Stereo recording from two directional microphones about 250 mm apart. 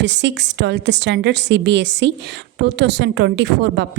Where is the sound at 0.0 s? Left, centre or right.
Right.